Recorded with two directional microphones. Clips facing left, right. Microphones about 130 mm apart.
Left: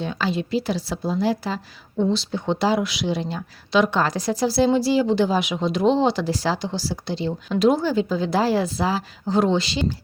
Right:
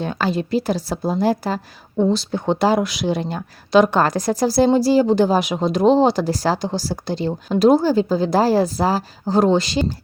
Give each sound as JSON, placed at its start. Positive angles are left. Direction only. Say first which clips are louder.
{"t": 0.0, "sound": "a woman's voice", "louder": "right 3 dB", "side_deg": -50}